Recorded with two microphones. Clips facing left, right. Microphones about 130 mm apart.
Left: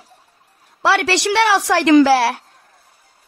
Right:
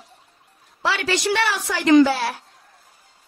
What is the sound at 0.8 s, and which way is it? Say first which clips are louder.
A woman's voice: left 6 dB; 70° left (ahead or behind).